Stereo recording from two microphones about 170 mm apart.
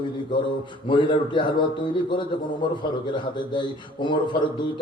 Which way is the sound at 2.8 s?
25° left (ahead or behind).